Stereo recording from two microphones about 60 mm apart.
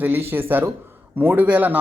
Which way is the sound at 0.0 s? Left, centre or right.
Right.